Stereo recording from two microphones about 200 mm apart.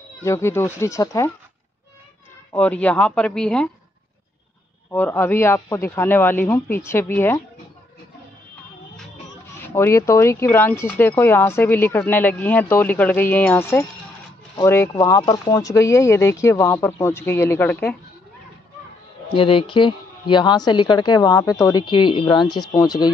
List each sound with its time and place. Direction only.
0.2 s speech: 15° left (ahead or behind)
2.5 s speech: 5° left (ahead or behind)
4.9 s speech: 10° left (ahead or behind)
9.7 s speech: 10° left (ahead or behind)
19.3 s a woman's voice: 25° left (ahead or behind)